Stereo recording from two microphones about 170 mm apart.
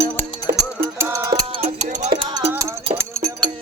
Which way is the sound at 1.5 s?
40° right (ahead or behind).